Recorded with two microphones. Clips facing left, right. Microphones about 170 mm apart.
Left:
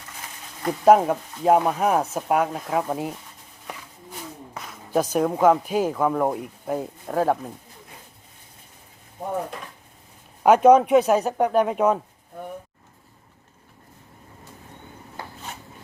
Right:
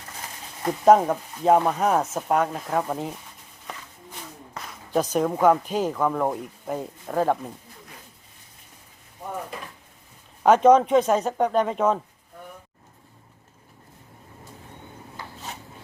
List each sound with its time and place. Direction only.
0.9 s speech: 5° left (ahead or behind)
4.5 s speech: 5° left (ahead or behind)
10.4 s speech: 10° left (ahead or behind)